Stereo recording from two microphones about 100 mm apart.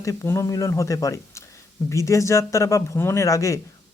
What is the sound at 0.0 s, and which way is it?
Speech, 35° left (ahead or behind).